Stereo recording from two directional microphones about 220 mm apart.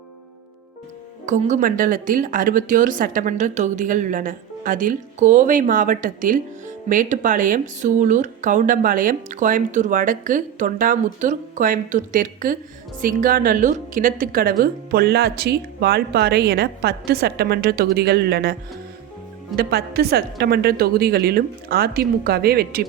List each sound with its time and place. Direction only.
1.3 s a woman's voice: 35° right (ahead or behind)
19.5 s a woman's voice: 45° right (ahead or behind)